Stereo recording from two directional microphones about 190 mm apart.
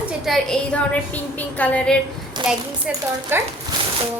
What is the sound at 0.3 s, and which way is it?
A woman's voice, centre (ahead or behind).